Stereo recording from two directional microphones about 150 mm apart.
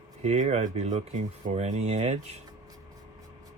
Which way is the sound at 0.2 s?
45° right (ahead or behind).